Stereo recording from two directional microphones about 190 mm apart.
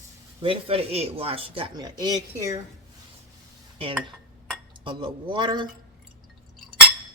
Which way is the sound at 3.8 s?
30° right (ahead or behind).